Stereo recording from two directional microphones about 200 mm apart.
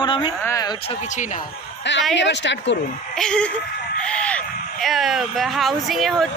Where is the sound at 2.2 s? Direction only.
65° left (ahead or behind).